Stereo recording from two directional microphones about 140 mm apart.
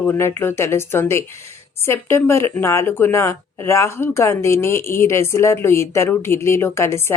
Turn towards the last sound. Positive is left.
turn(degrees=20)  # may be behind; listen again after turning